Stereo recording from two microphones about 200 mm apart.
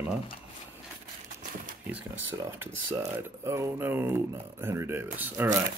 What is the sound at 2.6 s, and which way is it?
Speech, 15° right (ahead or behind).